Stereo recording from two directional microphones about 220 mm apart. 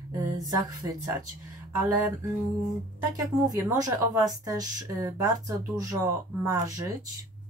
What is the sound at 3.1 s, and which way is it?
Speech, 15° right (ahead or behind).